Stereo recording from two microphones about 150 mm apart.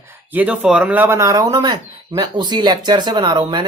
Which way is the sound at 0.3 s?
10° right (ahead or behind).